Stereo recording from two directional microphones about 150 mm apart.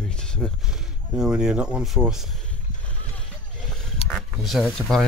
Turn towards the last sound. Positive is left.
turn(degrees=5)  # may be behind; listen again after turning